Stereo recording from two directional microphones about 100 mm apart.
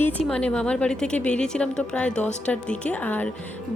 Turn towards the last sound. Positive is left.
turn(degrees=15)  # may be behind; listen again after turning